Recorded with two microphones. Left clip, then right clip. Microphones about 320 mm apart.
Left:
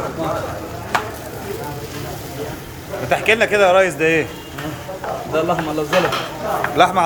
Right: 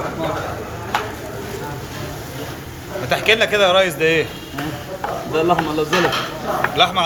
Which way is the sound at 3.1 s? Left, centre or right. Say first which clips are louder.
Even; centre.